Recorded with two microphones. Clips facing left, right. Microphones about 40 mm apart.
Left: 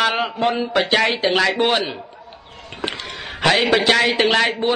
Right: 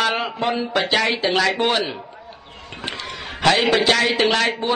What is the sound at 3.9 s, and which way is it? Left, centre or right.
Speech, centre.